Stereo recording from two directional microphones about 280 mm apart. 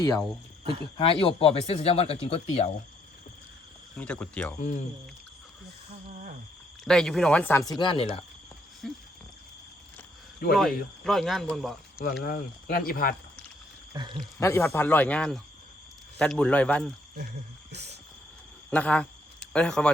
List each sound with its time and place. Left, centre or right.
0.6 s speech: centre
0.9 s speech: centre
3.9 s speech: centre
6.8 s speech: centre
8.8 s a sound: centre
10.5 s speech: centre
12.2 s speech: left
13.9 s speech: centre
14.2 s speech: centre
17.7 s a sound: right
18.7 s speech: centre